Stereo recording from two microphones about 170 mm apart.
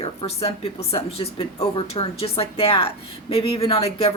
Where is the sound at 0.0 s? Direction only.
35° left (ahead or behind).